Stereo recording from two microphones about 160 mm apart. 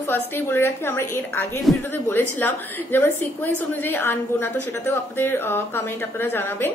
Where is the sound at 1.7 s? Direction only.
Centre (ahead or behind).